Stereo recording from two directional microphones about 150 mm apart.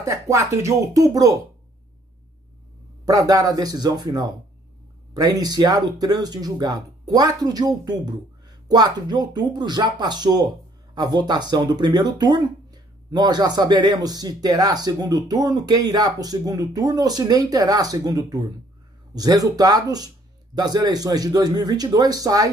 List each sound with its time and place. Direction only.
0.0 s speech: 20° right (ahead or behind)
3.1 s speech: 25° right (ahead or behind)